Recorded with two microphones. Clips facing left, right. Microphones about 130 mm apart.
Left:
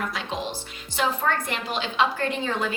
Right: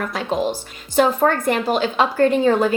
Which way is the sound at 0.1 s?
45° right (ahead or behind).